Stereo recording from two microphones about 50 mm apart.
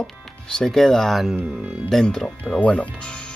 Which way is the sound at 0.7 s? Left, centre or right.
Centre.